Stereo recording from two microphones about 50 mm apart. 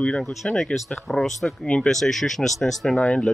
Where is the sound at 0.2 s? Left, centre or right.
Centre.